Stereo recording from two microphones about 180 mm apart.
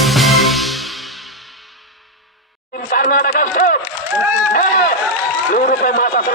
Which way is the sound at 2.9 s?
50° left (ahead or behind).